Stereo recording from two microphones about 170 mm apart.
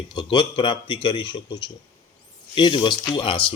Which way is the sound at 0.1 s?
25° left (ahead or behind).